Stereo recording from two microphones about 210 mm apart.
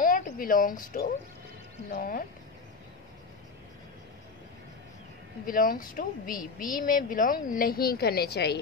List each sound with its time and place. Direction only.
0.0 s speech: 40° left (ahead or behind)
5.5 s speech: 40° left (ahead or behind)